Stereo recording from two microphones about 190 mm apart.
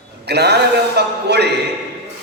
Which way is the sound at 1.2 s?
60° right (ahead or behind).